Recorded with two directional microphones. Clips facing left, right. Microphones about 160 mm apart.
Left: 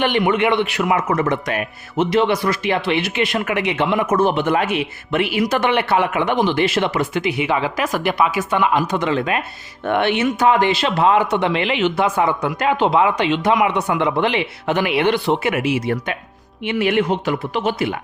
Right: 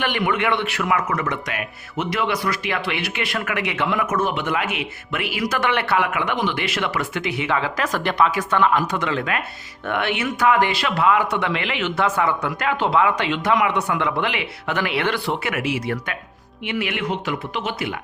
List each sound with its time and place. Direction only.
0.0 s a man's voice: 25° left (ahead or behind)
16.6 s speech: 30° left (ahead or behind)